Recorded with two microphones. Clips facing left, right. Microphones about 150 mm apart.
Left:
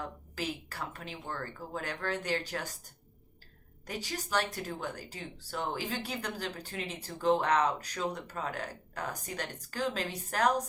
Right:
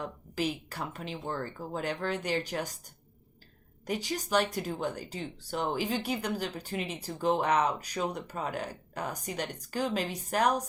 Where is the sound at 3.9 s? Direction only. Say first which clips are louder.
Right 5 dB; 15° right (ahead or behind).